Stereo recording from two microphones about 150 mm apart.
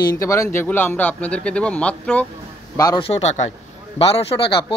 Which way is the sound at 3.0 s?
45° left (ahead or behind).